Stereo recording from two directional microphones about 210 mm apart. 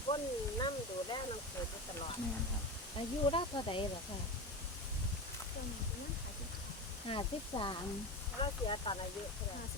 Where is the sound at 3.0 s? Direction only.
25° left (ahead or behind).